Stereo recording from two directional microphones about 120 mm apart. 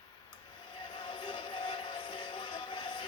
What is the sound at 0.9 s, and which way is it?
Music, 45° left (ahead or behind).